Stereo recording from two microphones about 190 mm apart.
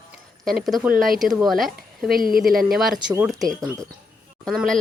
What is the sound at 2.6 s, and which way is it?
Speech, centre (ahead or behind).